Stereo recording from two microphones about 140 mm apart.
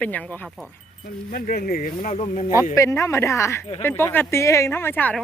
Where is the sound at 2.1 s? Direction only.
50° left (ahead or behind).